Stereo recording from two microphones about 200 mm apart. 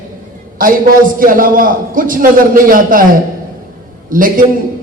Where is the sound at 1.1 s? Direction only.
45° right (ahead or behind).